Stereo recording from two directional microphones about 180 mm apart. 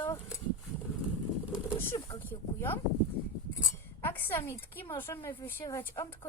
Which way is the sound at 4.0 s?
10° left (ahead or behind).